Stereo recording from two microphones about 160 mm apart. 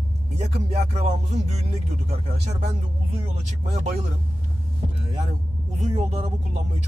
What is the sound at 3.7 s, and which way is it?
Speech, 45° right (ahead or behind).